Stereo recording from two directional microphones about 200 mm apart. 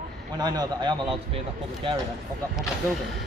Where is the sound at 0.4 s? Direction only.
20° right (ahead or behind).